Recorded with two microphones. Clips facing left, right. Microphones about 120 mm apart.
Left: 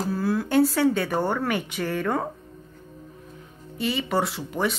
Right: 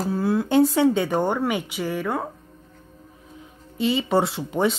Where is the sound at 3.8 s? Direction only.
25° right (ahead or behind).